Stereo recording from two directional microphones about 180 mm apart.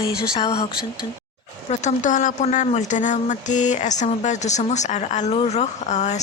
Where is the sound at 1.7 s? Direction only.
45° left (ahead or behind).